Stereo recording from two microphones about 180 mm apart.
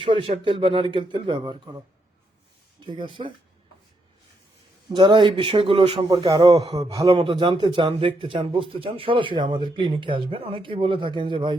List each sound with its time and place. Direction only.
0.0 s a man's voice: 30° right (ahead or behind)
2.8 s a man's voice: 25° right (ahead or behind)
4.9 s a man's voice: 25° right (ahead or behind)
7.1 s a man's voice: 30° right (ahead or behind)